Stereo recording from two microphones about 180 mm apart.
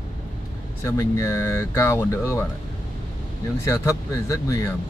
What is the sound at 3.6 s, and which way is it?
Speech, 15° left (ahead or behind).